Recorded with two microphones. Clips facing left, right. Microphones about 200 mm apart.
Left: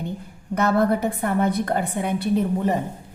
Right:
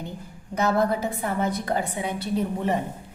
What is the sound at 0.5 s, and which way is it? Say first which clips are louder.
A woman's voice: left 3 dB; 60° left (ahead or behind).